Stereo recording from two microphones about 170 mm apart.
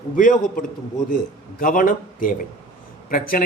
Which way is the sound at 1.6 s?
55° left (ahead or behind).